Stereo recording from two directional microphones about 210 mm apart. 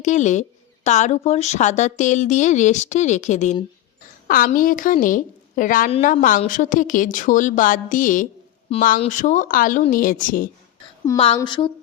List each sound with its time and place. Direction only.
0.0 s a woman's voice: 35° left (ahead or behind)
11.3 s a woman's voice: 20° left (ahead or behind)